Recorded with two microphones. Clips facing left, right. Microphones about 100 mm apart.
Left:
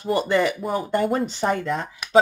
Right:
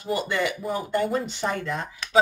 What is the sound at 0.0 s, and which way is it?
Speech, 35° left (ahead or behind).